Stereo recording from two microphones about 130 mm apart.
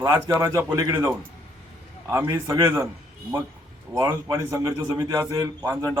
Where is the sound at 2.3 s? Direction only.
30° right (ahead or behind).